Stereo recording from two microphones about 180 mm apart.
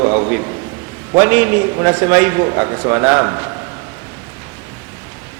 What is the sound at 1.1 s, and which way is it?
A man's voice, 10° right (ahead or behind).